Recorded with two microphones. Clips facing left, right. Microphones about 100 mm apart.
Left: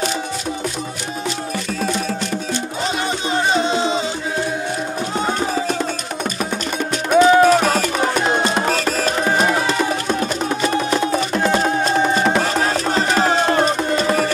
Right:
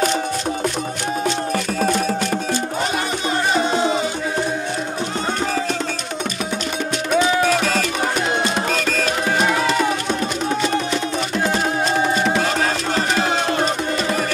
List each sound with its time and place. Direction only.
3.6 s music: 25° left (ahead or behind)
7.1 s music: 45° left (ahead or behind)
12.2 s music: 55° left (ahead or behind)
13.1 s a sound: 40° left (ahead or behind)